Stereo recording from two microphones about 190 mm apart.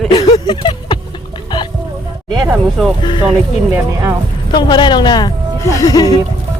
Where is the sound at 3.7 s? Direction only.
15° right (ahead or behind).